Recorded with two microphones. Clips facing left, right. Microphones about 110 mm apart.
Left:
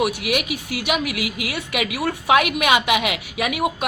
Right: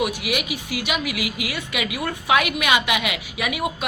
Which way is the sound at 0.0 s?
50° left (ahead or behind).